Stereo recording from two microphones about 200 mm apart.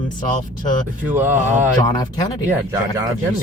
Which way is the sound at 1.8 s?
20° left (ahead or behind).